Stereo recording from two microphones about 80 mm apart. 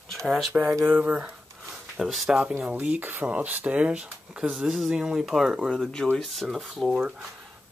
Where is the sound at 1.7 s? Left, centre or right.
Centre.